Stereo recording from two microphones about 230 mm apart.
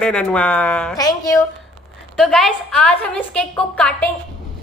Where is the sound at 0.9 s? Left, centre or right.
Centre.